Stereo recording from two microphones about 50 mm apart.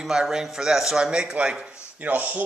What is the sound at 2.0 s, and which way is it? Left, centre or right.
Speech, right.